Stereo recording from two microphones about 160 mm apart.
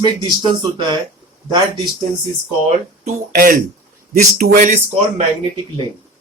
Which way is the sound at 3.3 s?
60° right (ahead or behind).